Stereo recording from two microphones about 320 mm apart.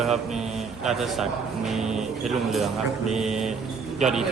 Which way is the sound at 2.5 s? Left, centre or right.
Centre.